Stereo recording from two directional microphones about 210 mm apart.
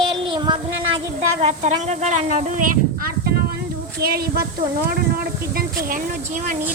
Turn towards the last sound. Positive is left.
turn(degrees=-45)  # may be behind; listen again after turning